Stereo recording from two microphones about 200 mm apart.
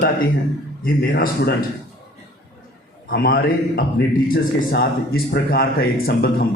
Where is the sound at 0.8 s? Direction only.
45° left (ahead or behind).